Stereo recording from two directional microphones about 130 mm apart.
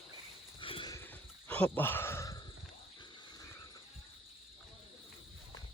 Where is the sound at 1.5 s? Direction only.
15° left (ahead or behind).